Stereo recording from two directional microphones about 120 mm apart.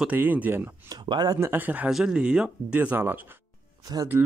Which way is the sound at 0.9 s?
35° right (ahead or behind).